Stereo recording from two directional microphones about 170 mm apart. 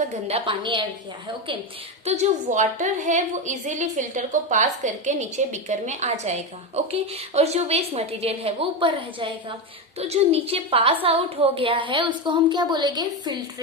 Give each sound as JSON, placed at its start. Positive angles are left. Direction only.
{"t": 0.1, "sound": "a woman's voice", "side_deg": -35}
{"t": 2.0, "sound": "a woman's voice", "side_deg": -45}